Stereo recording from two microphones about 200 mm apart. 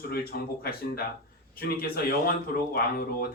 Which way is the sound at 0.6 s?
50° left (ahead or behind).